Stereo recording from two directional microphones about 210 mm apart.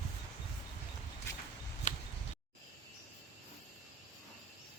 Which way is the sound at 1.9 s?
35° left (ahead or behind).